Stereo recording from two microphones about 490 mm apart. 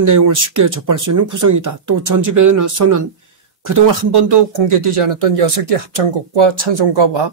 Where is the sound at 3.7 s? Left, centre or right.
Right.